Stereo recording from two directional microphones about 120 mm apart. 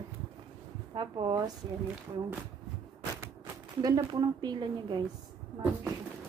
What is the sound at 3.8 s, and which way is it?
A woman's voice, 35° right (ahead or behind).